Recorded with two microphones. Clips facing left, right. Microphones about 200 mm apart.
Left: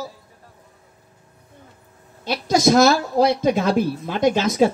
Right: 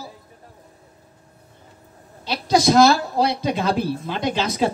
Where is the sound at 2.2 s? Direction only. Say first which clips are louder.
Left 1 dB; 50° left (ahead or behind).